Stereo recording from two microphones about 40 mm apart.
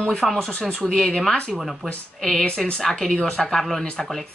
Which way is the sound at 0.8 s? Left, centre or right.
Centre.